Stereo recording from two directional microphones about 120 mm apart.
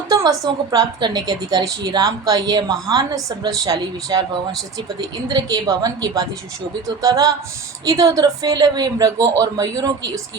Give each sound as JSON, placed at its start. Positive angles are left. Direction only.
{"t": 0.1, "sound": "a woman's voice", "side_deg": -30}